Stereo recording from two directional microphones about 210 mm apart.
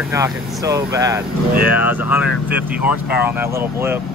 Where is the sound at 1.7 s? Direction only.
90° left.